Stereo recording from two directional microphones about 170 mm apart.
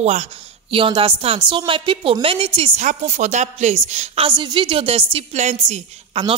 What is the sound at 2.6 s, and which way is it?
A woman's voice, 45° right (ahead or behind).